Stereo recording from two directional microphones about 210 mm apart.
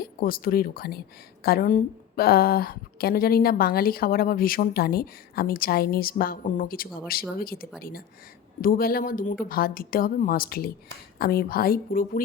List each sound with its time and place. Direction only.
0.0 s a woman's voice: 45° left (ahead or behind)